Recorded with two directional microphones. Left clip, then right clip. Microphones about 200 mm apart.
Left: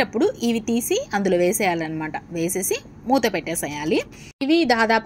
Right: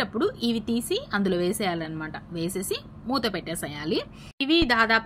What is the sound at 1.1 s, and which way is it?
Speech, 10° left (ahead or behind).